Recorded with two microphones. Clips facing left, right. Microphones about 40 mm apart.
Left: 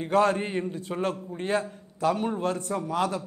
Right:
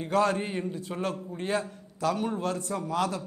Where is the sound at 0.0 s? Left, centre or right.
Left.